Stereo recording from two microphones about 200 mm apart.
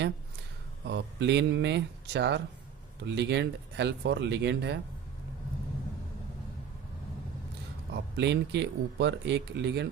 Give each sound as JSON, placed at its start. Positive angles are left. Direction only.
{"t": 0.9, "sound": "speech", "side_deg": -60}
{"t": 7.9, "sound": "speech", "side_deg": -60}